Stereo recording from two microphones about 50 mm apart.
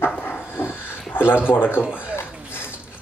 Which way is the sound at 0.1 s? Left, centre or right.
Left.